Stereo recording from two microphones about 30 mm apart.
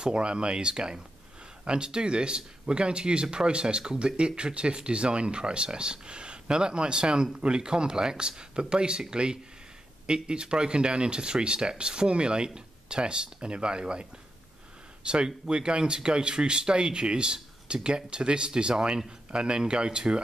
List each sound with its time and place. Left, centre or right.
0.0 s speech: right
15.2 s speech: right